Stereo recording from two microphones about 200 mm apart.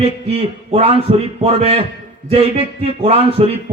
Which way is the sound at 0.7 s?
30° right (ahead or behind).